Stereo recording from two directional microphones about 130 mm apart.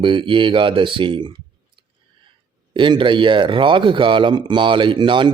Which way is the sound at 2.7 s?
40° right (ahead or behind).